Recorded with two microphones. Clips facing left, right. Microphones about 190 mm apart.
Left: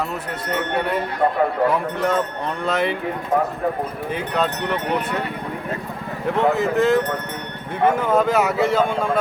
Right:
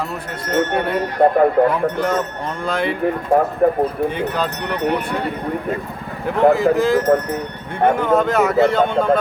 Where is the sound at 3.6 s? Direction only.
50° right (ahead or behind).